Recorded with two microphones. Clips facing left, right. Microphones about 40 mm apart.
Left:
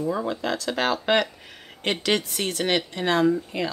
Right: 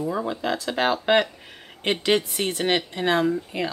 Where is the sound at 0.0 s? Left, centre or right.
Centre.